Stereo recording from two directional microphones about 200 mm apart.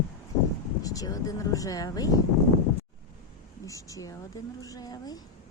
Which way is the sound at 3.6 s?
15° left (ahead or behind).